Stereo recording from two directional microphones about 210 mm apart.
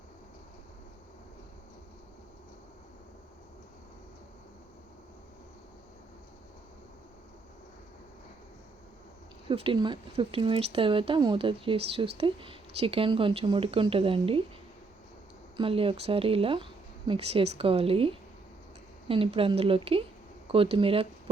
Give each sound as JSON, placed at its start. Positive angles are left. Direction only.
{"t": 9.5, "sound": "speech", "side_deg": -25}
{"t": 15.5, "sound": "speech", "side_deg": -25}